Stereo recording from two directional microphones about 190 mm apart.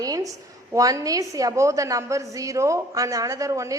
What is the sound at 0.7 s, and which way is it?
A woman's voice, 15° right (ahead or behind).